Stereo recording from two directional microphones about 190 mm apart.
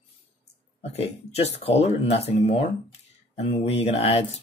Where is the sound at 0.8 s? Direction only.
35° left (ahead or behind).